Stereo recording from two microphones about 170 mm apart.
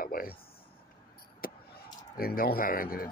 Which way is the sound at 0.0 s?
60° left (ahead or behind).